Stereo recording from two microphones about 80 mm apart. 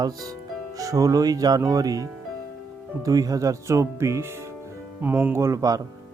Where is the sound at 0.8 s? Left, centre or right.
Right.